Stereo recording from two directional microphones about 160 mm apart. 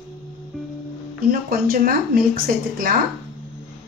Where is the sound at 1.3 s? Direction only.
65° right (ahead or behind).